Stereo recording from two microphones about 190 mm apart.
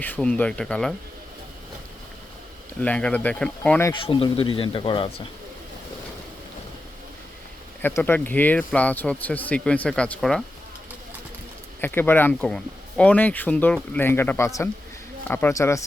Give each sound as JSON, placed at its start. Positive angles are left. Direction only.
{"t": 0.0, "sound": "speech", "side_deg": 10}
{"t": 2.8, "sound": "speech", "side_deg": 5}
{"t": 3.8, "sound": "speech", "side_deg": 25}
{"t": 7.8, "sound": "speech", "side_deg": 10}
{"t": 11.8, "sound": "speech", "side_deg": 10}